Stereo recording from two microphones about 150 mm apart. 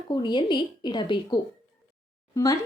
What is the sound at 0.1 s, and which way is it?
A woman's voice, 30° left (ahead or behind).